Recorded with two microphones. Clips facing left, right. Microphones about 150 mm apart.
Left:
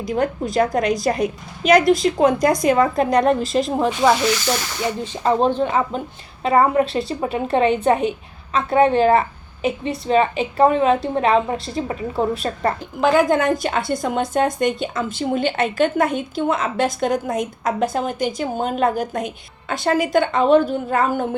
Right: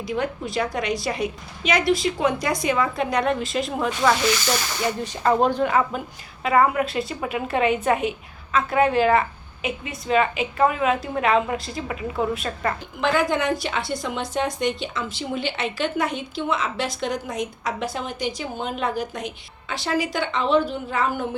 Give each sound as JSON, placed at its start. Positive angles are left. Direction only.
{"t": 0.0, "sound": "a woman's voice", "side_deg": 45}
{"t": 5.2, "sound": "a woman's voice", "side_deg": 20}